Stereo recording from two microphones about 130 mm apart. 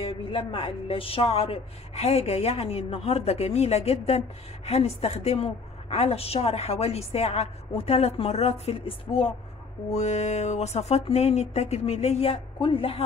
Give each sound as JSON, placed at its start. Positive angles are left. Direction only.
{"t": 0.0, "sound": "a woman's voice", "side_deg": 45}
{"t": 9.9, "sound": "speech", "side_deg": 60}